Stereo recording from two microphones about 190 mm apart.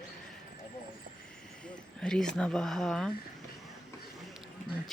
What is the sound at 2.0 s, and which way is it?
Speech, 5° left (ahead or behind).